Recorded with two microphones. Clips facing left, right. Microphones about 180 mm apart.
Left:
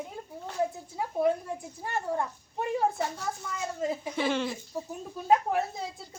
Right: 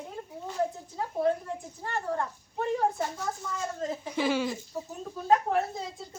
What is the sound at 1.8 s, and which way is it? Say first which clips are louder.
Speech: left 1 dB; 15° left (ahead or behind).